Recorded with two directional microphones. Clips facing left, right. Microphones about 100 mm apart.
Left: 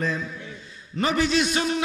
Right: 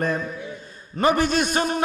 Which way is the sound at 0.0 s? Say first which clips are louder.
Right 3 dB; 55° right (ahead or behind).